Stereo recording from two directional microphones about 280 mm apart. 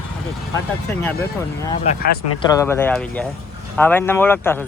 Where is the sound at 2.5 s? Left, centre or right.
Centre.